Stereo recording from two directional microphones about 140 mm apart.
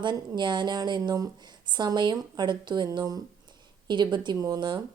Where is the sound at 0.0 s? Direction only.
35° right (ahead or behind).